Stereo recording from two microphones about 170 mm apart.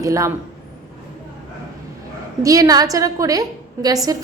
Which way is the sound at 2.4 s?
20° right (ahead or behind).